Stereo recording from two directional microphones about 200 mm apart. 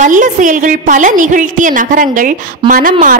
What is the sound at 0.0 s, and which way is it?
A woman's voice, 40° right (ahead or behind).